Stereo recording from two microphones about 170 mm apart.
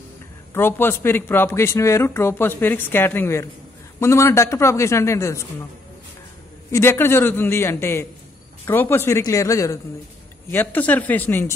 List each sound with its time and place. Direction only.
0.6 s speech: 15° left (ahead or behind)
6.7 s speech: 15° left (ahead or behind)